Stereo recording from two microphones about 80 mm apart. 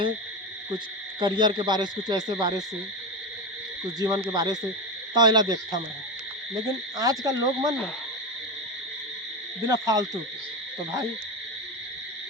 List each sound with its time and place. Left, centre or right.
1.2 s speech: right
4.0 s speech: right
6.5 s frog: right
9.6 s frog: right